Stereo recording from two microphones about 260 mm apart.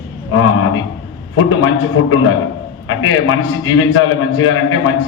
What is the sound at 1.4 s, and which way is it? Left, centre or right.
A man's voice, left.